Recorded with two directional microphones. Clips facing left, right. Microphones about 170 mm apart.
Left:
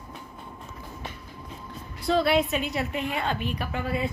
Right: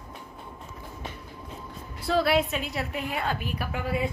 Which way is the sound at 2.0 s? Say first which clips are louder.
Left 1 dB; 5° right (ahead or behind).